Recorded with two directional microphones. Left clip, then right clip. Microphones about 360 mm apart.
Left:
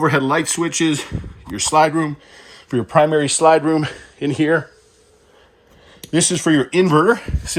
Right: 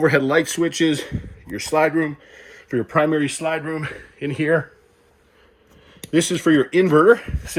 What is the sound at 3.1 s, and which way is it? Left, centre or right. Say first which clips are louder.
Speech: left 9 dB; left.